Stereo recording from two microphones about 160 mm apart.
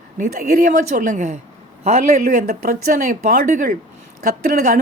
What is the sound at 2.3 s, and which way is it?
A woman's voice, 60° right (ahead or behind).